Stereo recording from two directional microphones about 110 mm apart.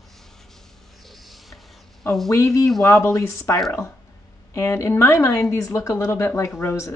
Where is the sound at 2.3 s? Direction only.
30° left (ahead or behind).